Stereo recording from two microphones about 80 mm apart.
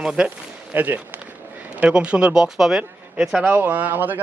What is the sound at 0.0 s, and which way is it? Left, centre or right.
Speech, centre.